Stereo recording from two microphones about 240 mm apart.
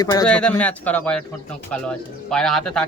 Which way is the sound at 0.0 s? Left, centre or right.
Centre.